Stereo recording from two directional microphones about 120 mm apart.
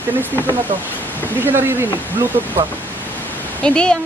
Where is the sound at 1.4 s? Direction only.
15° right (ahead or behind).